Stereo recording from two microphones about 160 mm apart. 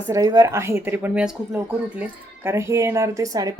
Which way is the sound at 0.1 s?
20° right (ahead or behind).